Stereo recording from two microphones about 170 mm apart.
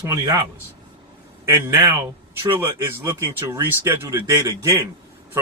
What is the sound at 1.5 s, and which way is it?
Speech, 15° right (ahead or behind).